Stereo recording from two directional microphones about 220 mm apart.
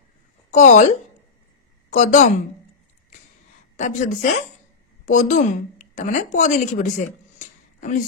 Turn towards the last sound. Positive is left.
turn(degrees=35)  # may be behind; listen again after turning